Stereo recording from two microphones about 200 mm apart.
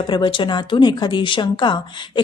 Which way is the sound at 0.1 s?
25° left (ahead or behind).